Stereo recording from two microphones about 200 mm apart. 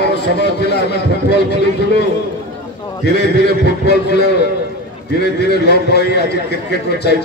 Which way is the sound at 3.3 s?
55° left (ahead or behind).